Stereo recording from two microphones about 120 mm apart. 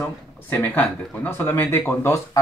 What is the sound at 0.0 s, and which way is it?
Speech, 15° left (ahead or behind).